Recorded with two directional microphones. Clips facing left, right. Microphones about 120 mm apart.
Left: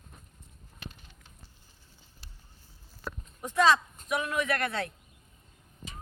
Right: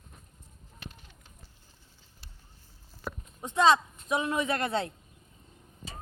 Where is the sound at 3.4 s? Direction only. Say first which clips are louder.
Right 1 dB; 25° right (ahead or behind).